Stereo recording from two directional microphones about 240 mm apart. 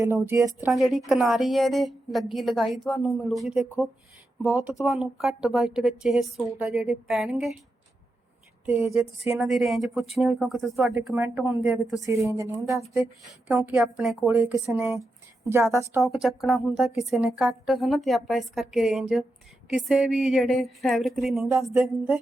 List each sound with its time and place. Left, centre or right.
0.0 s a woman's voice: centre
0.7 s a woman's voice: centre
8.6 s a woman's voice: centre
12.0 s a woman's voice: centre
13.5 s a woman's voice: centre
16.0 s a woman's voice: centre